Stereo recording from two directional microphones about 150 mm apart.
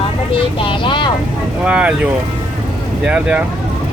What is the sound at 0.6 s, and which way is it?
Speech, 35° left (ahead or behind).